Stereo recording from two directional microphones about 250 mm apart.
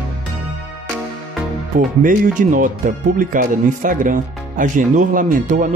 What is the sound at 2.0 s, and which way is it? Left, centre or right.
Speech, right.